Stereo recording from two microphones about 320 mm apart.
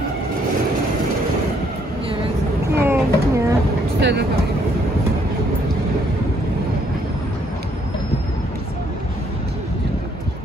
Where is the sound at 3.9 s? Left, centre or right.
Right.